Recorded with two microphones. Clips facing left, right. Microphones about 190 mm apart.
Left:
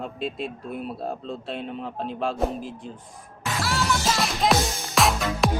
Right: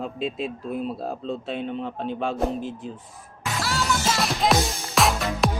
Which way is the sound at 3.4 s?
Centre (ahead or behind).